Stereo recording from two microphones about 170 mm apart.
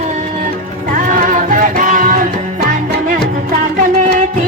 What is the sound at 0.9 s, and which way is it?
Music, 50° right (ahead or behind).